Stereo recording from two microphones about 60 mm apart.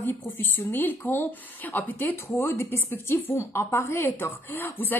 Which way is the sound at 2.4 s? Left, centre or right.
Left.